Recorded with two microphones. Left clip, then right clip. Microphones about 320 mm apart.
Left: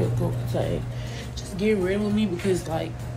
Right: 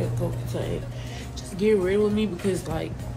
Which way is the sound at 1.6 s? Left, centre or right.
Centre.